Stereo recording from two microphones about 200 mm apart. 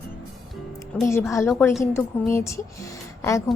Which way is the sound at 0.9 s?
10° left (ahead or behind).